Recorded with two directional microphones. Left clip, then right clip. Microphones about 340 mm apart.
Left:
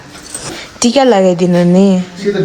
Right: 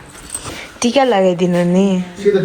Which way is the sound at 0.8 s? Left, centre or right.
Centre.